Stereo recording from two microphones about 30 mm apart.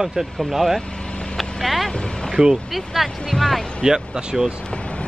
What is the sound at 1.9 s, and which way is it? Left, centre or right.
Speech, left.